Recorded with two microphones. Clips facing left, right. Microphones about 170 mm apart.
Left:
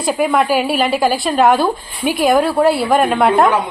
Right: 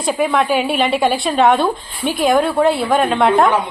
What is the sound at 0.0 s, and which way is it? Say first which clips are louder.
Speech: left 1 dB; centre (ahead or behind).